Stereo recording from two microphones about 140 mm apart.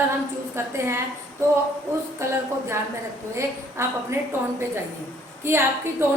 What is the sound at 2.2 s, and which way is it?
Speech, 20° right (ahead or behind).